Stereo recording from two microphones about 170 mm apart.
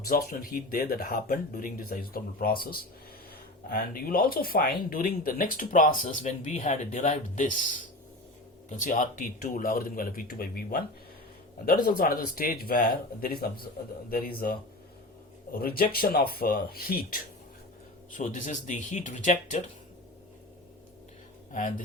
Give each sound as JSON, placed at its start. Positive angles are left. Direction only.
{"t": 0.0, "sound": "speech", "side_deg": 60}
{"t": 15.5, "sound": "speech", "side_deg": 60}
{"t": 18.1, "sound": "speech", "side_deg": 50}